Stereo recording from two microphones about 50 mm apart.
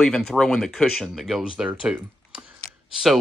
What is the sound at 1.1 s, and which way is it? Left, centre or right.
Speech, centre.